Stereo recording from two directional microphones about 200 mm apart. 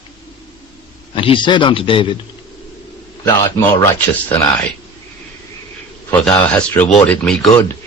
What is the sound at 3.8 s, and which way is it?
Speech, 10° left (ahead or behind).